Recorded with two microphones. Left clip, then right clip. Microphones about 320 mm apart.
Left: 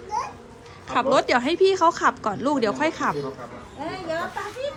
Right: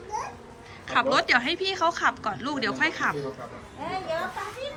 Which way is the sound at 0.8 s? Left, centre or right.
Centre.